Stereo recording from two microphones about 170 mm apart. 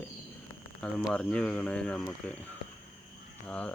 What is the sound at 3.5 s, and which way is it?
Speech, 5° left (ahead or behind).